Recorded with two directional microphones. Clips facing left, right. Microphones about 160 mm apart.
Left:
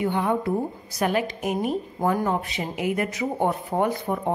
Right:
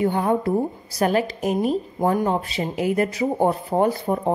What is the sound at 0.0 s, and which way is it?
A woman's voice, 40° right (ahead or behind).